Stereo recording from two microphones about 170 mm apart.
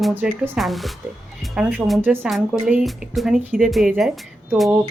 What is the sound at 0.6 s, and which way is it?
Speech, centre (ahead or behind).